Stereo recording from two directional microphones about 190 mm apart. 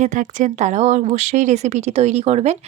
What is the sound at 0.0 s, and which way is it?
Speech, 40° right (ahead or behind).